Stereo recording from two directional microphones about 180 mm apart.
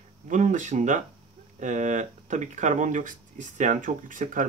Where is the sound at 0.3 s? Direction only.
45° right (ahead or behind).